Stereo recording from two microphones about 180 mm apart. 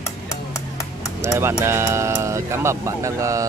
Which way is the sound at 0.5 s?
20° left (ahead or behind).